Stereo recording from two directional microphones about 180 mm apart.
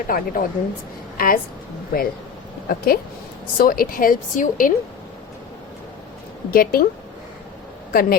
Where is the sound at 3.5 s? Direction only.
50° left (ahead or behind).